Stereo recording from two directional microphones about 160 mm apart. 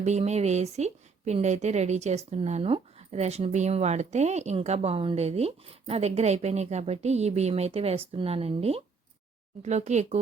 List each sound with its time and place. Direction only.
0.0 s a woman's voice: 45° right (ahead or behind)